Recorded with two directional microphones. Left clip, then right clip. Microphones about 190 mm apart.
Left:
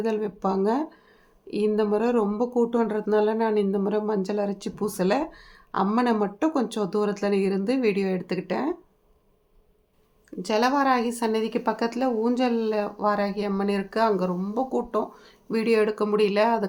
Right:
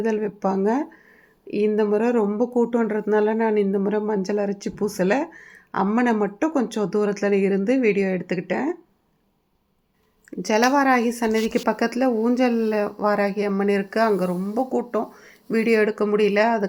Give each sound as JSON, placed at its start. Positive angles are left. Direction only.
{"t": 0.0, "sound": "speech", "side_deg": -15}
{"t": 10.2, "sound": "speech", "side_deg": -20}